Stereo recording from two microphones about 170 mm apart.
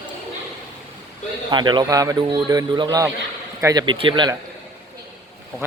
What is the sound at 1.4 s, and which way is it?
A man's voice, 25° right (ahead or behind).